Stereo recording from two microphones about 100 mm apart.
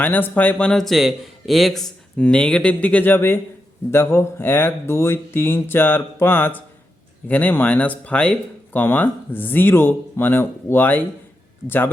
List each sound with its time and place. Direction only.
0.0 s speech: 15° left (ahead or behind)